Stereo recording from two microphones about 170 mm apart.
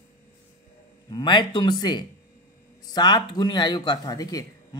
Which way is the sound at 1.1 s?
25° left (ahead or behind).